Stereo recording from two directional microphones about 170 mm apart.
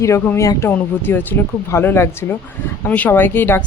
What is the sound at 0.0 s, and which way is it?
A woman's voice, 15° left (ahead or behind).